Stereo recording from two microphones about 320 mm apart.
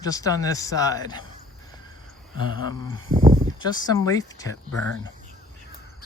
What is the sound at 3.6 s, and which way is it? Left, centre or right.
Speech, centre.